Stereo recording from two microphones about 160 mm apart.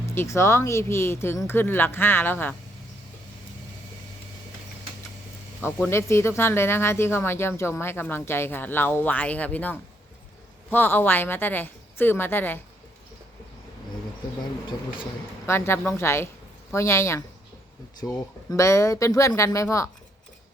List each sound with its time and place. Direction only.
0.0 s speech: 15° left (ahead or behind)
5.8 s speech: 15° left (ahead or behind)
15.4 s speech: 15° left (ahead or behind)